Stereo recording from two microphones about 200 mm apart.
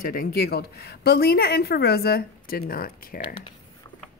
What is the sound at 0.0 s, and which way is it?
A woman's voice, 45° left (ahead or behind).